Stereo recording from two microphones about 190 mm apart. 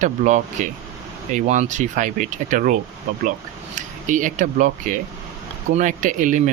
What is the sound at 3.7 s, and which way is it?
Speech, 40° right (ahead or behind).